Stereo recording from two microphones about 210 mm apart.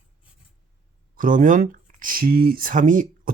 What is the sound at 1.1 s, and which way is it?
Speech, 40° right (ahead or behind).